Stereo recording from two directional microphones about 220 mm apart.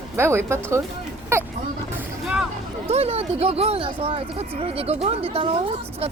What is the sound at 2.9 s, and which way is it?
Speech, 25° right (ahead or behind).